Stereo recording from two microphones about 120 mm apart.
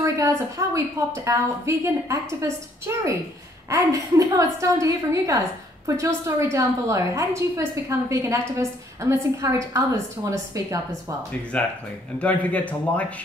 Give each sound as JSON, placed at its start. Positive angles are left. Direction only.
{"t": 0.0, "sound": "a woman's voice", "side_deg": -25}
{"t": 11.5, "sound": "a man's voice", "side_deg": 10}